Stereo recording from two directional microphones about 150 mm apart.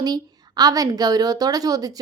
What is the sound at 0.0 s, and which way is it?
A woman's voice, 25° right (ahead or behind).